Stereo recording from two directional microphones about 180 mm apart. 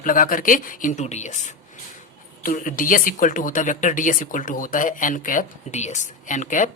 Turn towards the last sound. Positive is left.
turn(degrees=45)  # may be behind; listen again after turning